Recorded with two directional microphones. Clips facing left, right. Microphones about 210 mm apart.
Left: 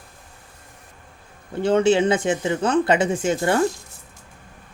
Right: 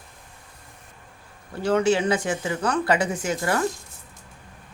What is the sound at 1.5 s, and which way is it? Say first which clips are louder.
Speech: left 3 dB; 25° left (ahead or behind).